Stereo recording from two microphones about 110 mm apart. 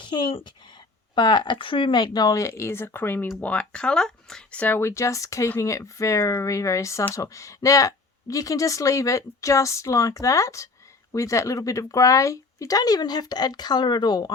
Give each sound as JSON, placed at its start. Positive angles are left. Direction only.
{"t": 0.0, "sound": "speech", "side_deg": 45}